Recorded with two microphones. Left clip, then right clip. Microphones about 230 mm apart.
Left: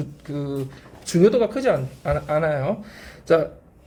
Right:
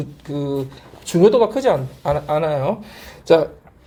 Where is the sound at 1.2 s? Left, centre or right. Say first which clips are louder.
Right 4 dB; centre.